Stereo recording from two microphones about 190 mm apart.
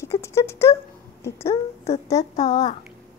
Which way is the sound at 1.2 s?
15° left (ahead or behind).